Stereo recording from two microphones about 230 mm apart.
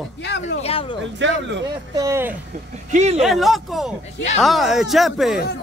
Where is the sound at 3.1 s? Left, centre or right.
Centre.